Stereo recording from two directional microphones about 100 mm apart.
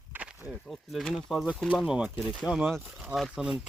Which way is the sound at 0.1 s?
15° right (ahead or behind).